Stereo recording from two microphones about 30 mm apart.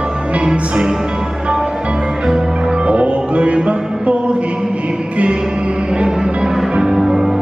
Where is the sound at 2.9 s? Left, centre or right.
Right.